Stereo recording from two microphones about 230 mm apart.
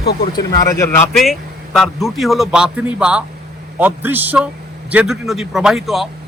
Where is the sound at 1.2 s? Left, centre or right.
Centre.